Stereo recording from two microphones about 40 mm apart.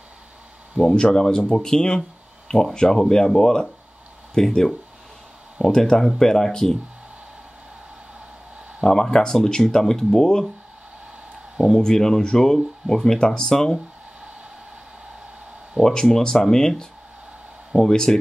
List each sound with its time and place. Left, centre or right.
0.8 s speech: centre
8.8 s speech: centre
11.7 s speech: centre
15.8 s speech: centre